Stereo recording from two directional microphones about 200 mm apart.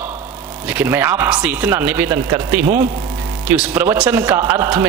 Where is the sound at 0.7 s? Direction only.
10° right (ahead or behind).